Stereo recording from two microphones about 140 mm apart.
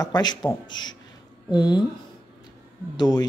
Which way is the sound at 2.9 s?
30° left (ahead or behind).